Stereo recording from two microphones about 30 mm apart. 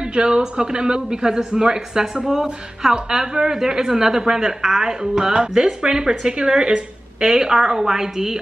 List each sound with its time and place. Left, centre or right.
0.1 s speech: right
5.5 s speech: centre